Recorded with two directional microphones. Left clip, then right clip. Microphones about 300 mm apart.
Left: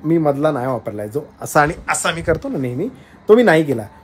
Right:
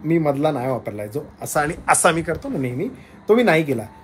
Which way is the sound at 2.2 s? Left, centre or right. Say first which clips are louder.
Left 5 dB; centre.